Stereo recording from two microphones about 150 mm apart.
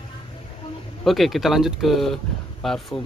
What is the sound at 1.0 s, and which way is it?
Speech, centre (ahead or behind).